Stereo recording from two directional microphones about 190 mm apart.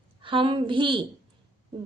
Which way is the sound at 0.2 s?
25° right (ahead or behind).